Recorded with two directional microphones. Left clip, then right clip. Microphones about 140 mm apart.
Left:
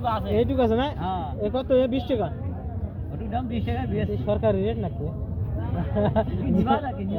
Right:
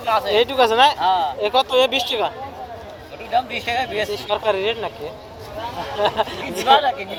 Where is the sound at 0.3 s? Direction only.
30° right (ahead or behind).